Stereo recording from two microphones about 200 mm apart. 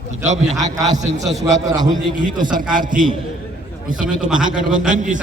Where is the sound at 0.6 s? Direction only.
20° right (ahead or behind).